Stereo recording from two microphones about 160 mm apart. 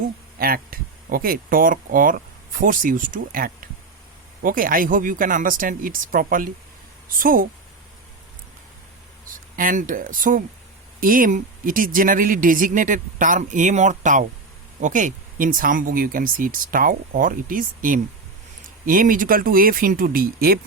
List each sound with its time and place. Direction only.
0.3 s speech: 65° right (ahead or behind)
9.2 s speech: 60° right (ahead or behind)